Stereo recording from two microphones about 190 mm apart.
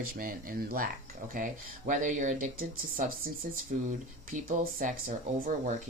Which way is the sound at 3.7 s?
40° right (ahead or behind).